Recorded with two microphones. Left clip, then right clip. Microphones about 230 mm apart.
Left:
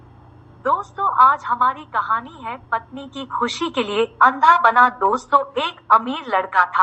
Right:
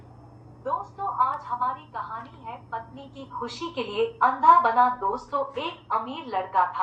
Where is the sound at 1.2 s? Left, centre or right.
Left.